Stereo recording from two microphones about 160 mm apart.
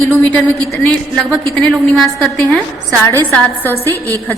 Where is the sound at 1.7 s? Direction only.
Centre (ahead or behind).